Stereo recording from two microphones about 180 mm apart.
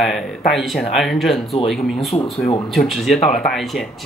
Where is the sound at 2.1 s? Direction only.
25° left (ahead or behind).